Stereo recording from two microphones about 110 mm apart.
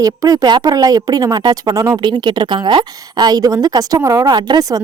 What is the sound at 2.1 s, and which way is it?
A woman's voice, 45° right (ahead or behind).